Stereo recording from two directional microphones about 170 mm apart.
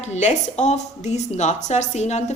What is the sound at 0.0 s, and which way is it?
A woman's voice, 45° left (ahead or behind).